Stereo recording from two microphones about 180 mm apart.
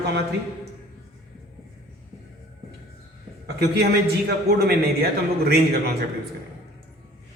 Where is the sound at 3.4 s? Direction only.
60° right (ahead or behind).